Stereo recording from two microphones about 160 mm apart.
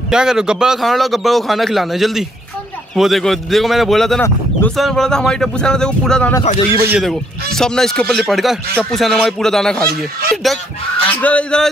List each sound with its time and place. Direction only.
0.1 s speech: 5° right (ahead or behind)
4.2 s speech: 10° left (ahead or behind)
4.7 s speech: centre (ahead or behind)
6.7 s a man's voice: 15° right (ahead or behind)
7.0 s speech: centre (ahead or behind)